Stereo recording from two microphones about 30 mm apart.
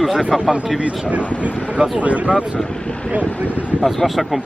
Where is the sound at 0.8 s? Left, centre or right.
Right.